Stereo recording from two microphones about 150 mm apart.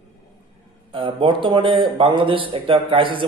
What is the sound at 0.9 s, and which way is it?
A man's voice, 35° right (ahead or behind).